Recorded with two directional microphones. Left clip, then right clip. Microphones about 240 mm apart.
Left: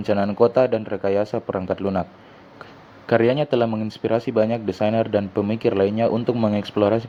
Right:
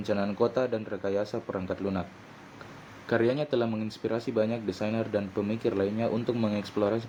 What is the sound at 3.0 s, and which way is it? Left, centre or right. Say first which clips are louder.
Speech: left 9 dB; left.